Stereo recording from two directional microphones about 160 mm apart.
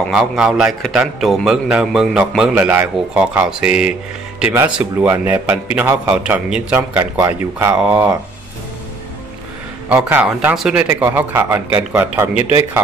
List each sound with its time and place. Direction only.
0.1 s a man's voice: 5° right (ahead or behind)
9.8 s speech: 10° right (ahead or behind)
12.4 s speech: 40° left (ahead or behind)